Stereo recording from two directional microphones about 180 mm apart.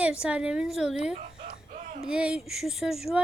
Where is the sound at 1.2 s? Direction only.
50° right (ahead or behind).